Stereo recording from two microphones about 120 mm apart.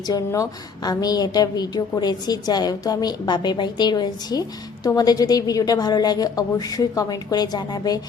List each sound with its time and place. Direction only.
0.1 s a woman's voice: 25° left (ahead or behind)